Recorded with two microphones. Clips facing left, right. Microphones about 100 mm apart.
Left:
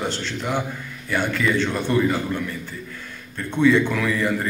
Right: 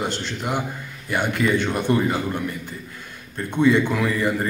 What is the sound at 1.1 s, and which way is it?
A man's voice, 20° right (ahead or behind).